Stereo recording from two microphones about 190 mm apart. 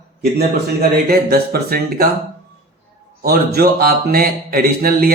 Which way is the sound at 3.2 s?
55° right (ahead or behind).